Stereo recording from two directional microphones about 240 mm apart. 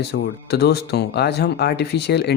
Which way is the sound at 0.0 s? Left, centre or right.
Left.